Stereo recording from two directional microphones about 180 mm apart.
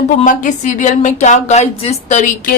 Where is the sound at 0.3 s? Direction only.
45° left (ahead or behind).